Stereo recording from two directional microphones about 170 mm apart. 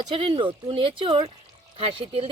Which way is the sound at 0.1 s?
30° right (ahead or behind).